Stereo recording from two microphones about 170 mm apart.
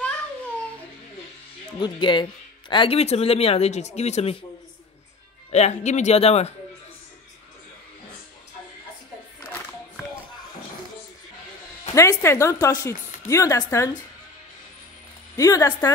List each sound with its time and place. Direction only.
1.8 s a woman's voice: 30° left (ahead or behind)
5.5 s speech: 40° left (ahead or behind)
11.9 s speech: 15° left (ahead or behind)
15.3 s a woman's voice: 20° left (ahead or behind)